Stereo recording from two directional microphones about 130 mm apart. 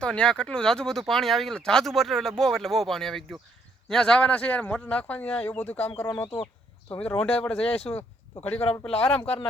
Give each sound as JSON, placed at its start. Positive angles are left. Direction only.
{"t": 0.0, "sound": "speech", "side_deg": 5}
{"t": 6.2, "sound": "speech", "side_deg": 45}
{"t": 6.9, "sound": "speech", "side_deg": 10}